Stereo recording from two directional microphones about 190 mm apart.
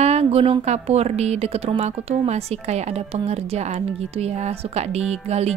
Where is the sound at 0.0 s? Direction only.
35° right (ahead or behind).